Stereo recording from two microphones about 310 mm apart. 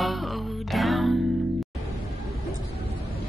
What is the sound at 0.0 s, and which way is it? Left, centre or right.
Music, centre.